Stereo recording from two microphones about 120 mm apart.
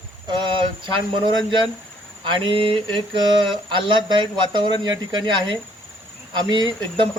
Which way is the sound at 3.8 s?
40° right (ahead or behind).